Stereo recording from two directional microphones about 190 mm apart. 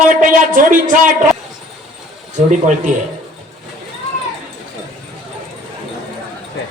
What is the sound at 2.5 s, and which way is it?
Speech, 40° right (ahead or behind).